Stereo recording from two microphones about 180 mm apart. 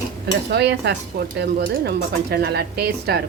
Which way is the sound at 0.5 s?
70° right (ahead or behind).